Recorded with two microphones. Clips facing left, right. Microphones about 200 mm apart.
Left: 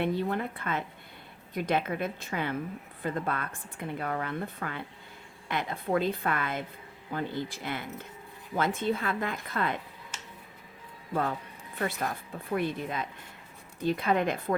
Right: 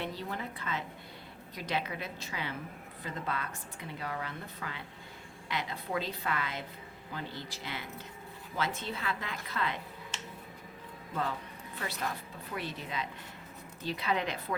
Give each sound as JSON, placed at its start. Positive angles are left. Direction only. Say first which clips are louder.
{"t": 0.0, "sound": "speech", "louder": "left 9 dB", "side_deg": 55}
{"t": 11.1, "sound": "speech", "louder": "left 5 dB", "side_deg": 50}